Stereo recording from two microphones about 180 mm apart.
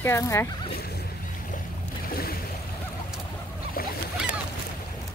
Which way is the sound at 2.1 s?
55° left (ahead or behind).